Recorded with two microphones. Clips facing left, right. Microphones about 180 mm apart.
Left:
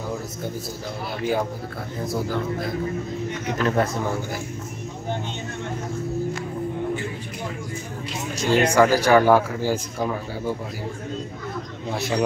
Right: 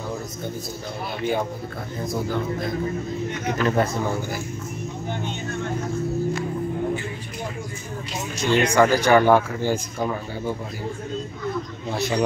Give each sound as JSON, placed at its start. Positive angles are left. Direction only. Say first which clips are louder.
{"t": 1.2, "sound": "speech", "louder": "left 1 dB", "side_deg": 5}
{"t": 8.4, "sound": "speech", "louder": "left 1 dB", "side_deg": 40}
{"t": 8.7, "sound": "speech", "louder": "even", "side_deg": 5}